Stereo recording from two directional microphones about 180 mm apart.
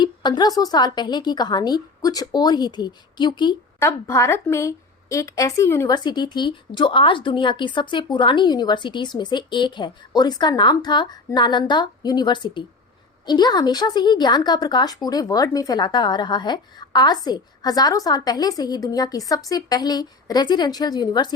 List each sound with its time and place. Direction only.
0.0 s a woman's voice: 25° left (ahead or behind)
3.8 s a woman's voice: 15° left (ahead or behind)